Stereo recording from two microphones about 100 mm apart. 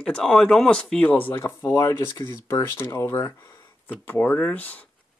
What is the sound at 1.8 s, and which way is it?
Speech, 30° left (ahead or behind).